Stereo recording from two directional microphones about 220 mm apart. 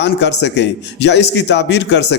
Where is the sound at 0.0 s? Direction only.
50° left (ahead or behind).